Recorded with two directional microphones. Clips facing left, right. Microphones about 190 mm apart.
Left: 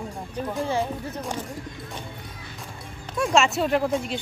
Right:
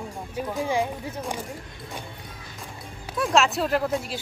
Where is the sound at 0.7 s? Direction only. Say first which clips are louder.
Even; 15° right (ahead or behind).